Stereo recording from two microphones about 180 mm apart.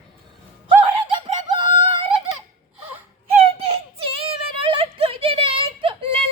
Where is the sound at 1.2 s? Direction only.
25° right (ahead or behind).